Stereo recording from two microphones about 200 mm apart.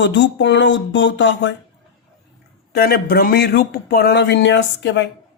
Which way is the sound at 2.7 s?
50° left (ahead or behind).